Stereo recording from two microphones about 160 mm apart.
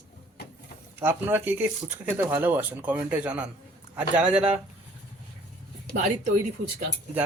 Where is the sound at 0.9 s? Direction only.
15° right (ahead or behind).